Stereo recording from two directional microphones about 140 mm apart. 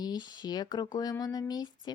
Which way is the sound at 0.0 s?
30° left (ahead or behind).